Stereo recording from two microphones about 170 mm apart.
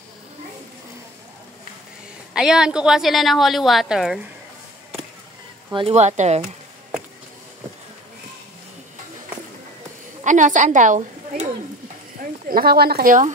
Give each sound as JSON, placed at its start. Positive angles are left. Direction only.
{"t": 2.3, "sound": "a woman's voice", "side_deg": -5}
{"t": 5.7, "sound": "speech", "side_deg": -35}
{"t": 10.2, "sound": "a woman's voice", "side_deg": -45}
{"t": 12.4, "sound": "speech", "side_deg": -60}